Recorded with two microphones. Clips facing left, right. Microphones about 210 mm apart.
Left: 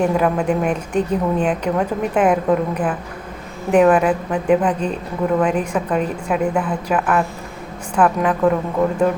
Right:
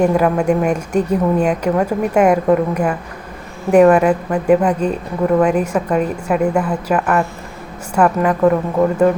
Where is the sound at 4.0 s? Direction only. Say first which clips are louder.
Right 3 dB; 10° right (ahead or behind).